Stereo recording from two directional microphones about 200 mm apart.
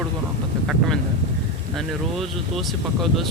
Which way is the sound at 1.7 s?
Centre (ahead or behind).